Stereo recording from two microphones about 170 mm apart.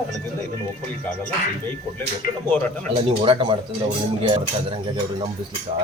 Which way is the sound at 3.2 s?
30° right (ahead or behind).